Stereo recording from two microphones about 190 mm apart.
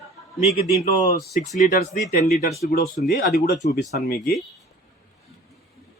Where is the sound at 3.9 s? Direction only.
55° left (ahead or behind).